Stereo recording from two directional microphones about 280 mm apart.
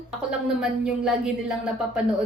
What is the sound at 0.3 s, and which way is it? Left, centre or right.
A woman's voice, centre.